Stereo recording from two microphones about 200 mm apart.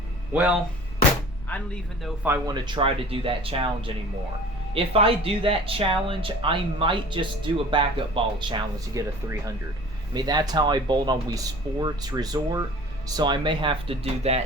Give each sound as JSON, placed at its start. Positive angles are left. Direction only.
{"t": 0.3, "sound": "speech", "side_deg": -5}
{"t": 2.0, "sound": "speech", "side_deg": -10}
{"t": 2.5, "sound": "speech", "side_deg": -25}